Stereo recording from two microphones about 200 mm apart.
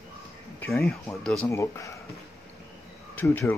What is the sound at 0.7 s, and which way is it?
Speech, centre (ahead or behind).